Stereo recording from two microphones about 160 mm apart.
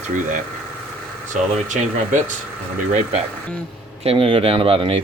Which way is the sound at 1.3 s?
50° right (ahead or behind).